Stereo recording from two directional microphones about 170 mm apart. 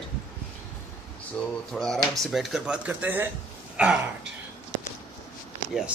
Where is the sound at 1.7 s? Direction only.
Centre (ahead or behind).